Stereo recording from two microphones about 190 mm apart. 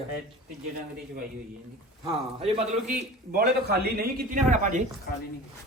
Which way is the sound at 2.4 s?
30° right (ahead or behind).